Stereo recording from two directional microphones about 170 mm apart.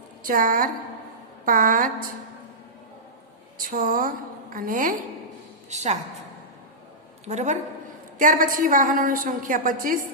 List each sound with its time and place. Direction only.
0.2 s a woman's voice: 55° right (ahead or behind)
3.6 s a woman's voice: 55° right (ahead or behind)
5.7 s a woman's voice: 40° right (ahead or behind)
7.3 s a woman's voice: 45° right (ahead or behind)